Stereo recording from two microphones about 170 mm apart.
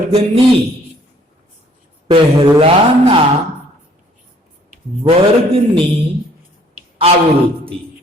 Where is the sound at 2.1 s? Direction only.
30° right (ahead or behind).